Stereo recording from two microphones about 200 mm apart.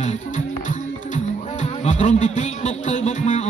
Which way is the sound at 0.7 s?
35° left (ahead or behind).